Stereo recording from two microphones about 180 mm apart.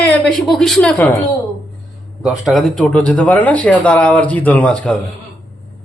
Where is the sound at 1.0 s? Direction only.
15° left (ahead or behind).